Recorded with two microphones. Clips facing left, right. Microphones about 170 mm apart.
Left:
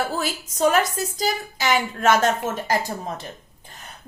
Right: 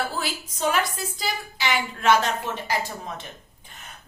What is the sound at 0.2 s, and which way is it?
A woman's voice, 45° left (ahead or behind).